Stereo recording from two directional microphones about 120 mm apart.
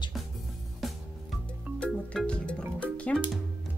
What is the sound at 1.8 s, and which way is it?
Music, 10° left (ahead or behind).